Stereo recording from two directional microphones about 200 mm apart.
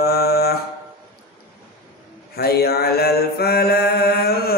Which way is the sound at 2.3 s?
50° left (ahead or behind).